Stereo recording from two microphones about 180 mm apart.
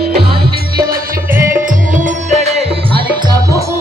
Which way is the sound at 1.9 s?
40° right (ahead or behind).